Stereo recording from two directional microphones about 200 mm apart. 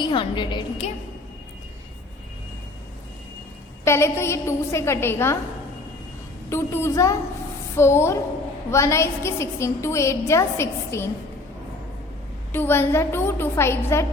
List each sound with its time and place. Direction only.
0.0 s a woman's voice: 25° left (ahead or behind)
3.8 s a woman's voice: 15° left (ahead or behind)
6.5 s a woman's voice: 10° left (ahead or behind)
12.5 s a woman's voice: 10° left (ahead or behind)